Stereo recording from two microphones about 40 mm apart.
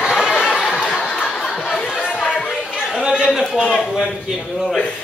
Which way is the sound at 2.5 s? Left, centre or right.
Centre.